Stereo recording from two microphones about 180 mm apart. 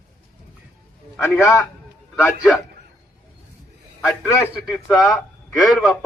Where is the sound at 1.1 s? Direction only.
15° left (ahead or behind).